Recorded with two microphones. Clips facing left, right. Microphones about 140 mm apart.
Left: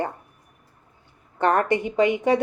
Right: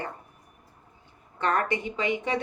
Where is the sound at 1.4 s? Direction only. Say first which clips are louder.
Left 6 dB; 55° left (ahead or behind).